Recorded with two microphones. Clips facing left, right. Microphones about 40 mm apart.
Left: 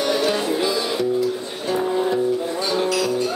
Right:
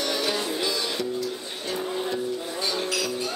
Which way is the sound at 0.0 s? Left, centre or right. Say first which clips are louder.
Left 6 dB; centre.